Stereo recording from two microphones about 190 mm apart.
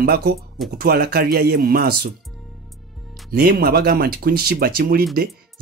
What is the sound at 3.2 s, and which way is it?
Speech, 55° right (ahead or behind).